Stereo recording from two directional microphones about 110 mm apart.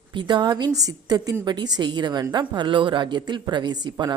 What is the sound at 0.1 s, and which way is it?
A woman's voice, 45° right (ahead or behind).